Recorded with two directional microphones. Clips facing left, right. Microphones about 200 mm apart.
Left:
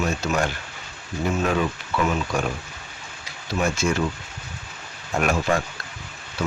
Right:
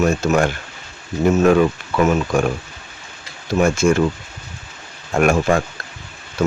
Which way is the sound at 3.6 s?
50° right (ahead or behind).